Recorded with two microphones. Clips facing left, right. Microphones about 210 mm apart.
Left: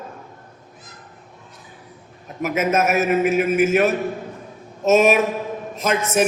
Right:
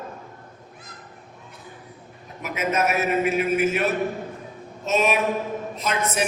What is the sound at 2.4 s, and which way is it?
A man's voice, 45° left (ahead or behind).